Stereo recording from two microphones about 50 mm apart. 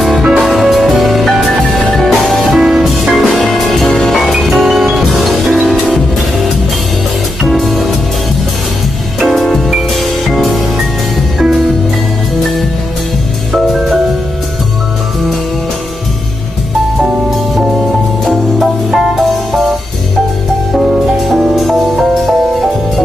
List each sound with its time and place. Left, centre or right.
0.2 s music: centre
0.5 s music: centre
7.4 s music: centre
9.2 s music: centre
13.5 s music: centre
18.2 s music: centre
20.7 s music: centre